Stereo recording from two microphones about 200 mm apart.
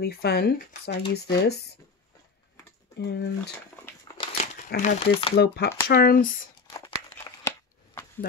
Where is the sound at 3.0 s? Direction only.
55° left (ahead or behind).